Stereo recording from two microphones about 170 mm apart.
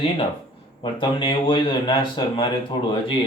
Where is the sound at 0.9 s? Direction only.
30° left (ahead or behind).